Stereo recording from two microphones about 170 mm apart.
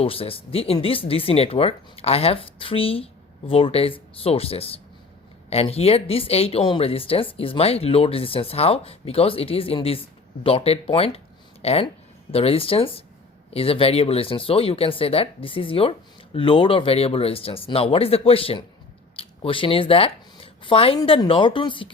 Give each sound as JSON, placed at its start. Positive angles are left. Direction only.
{"t": 0.0, "sound": "speech", "side_deg": 35}